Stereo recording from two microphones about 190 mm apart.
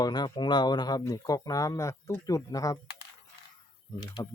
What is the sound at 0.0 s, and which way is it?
Speech, 20° left (ahead or behind).